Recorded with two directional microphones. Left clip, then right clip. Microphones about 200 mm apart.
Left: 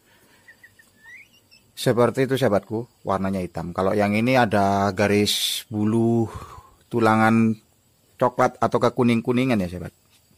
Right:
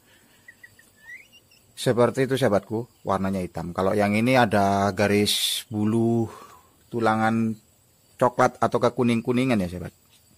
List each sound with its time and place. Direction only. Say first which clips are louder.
1.8 s speech: left 1 dB; 15° left (ahead or behind)
6.9 s speech: left 4 dB; 30° left (ahead or behind)
8.2 s speech: left 1 dB; 5° left (ahead or behind)